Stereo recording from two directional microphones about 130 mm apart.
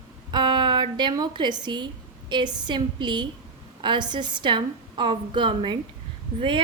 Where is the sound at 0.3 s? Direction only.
35° right (ahead or behind).